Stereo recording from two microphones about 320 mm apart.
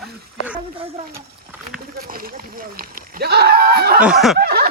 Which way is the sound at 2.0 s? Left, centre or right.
Right.